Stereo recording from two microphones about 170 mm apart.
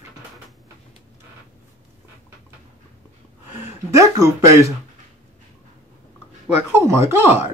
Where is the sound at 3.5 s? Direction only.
20° right (ahead or behind).